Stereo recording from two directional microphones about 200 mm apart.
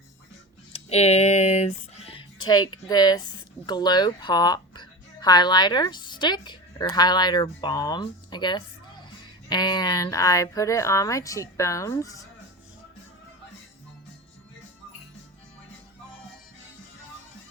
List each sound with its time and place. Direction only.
0.7 s speech: 30° left (ahead or behind)